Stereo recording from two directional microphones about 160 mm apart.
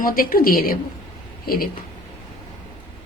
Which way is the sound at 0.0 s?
65° left (ahead or behind).